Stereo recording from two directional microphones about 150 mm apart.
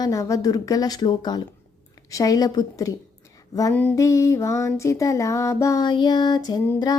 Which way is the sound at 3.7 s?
10° left (ahead or behind).